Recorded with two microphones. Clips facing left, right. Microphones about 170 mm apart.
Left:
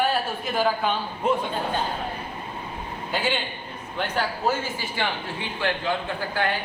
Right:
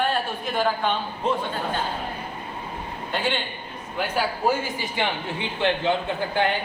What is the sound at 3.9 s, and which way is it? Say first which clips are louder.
A man's voice: right 1 dB; 10° right (ahead or behind).